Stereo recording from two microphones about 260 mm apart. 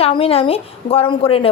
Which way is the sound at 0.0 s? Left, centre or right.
Left.